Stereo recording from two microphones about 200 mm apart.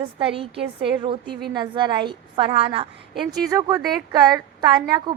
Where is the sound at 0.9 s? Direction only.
25° right (ahead or behind).